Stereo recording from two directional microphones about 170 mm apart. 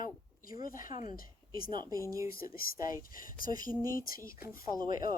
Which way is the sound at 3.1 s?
55° left (ahead or behind).